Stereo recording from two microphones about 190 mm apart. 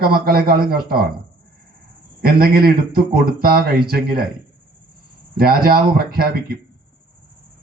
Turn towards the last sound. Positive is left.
turn(degrees=-50)  # may be behind; listen again after turning